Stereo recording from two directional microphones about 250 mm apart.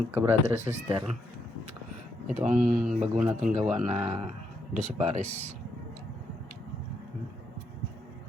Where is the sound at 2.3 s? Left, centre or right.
Right.